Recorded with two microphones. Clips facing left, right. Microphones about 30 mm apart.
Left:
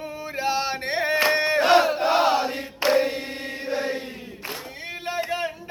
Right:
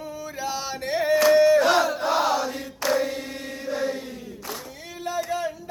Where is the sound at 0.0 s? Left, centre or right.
Left.